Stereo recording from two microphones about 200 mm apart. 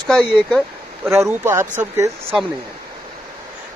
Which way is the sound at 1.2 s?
15° right (ahead or behind).